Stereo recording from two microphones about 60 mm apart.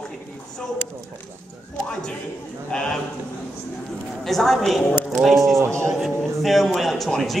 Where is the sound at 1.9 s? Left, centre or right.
Centre.